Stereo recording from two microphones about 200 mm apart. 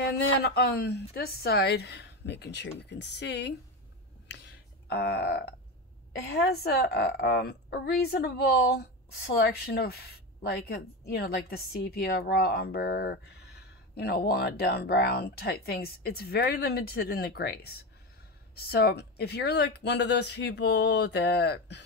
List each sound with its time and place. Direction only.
0.4 s speech: 55° left (ahead or behind)
4.3 s a sound: 60° left (ahead or behind)
6.1 s a woman's voice: 55° left (ahead or behind)